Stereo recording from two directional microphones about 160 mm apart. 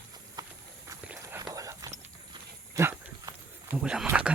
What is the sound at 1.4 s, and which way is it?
Clip-clop, 20° right (ahead or behind).